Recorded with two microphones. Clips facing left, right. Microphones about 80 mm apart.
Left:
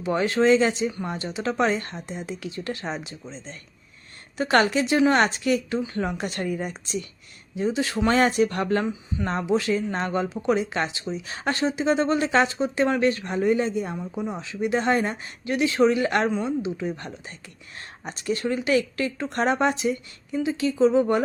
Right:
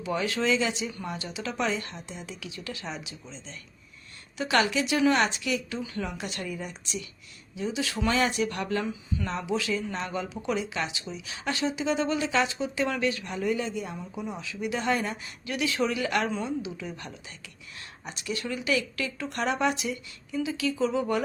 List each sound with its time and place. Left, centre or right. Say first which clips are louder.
0.0 s speech: left 7 dB; left